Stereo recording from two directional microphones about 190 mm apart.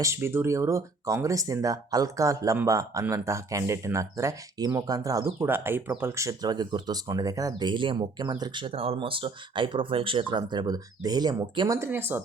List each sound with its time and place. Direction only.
0.0 s speech: 15° right (ahead or behind)